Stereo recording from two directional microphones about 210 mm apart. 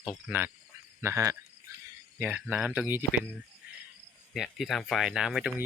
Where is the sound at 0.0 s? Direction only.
5° right (ahead or behind).